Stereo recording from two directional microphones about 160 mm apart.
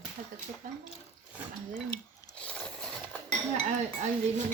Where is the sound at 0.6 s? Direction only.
55° right (ahead or behind).